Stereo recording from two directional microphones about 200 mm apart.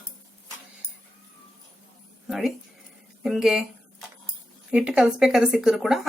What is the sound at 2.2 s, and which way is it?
Speech, centre (ahead or behind).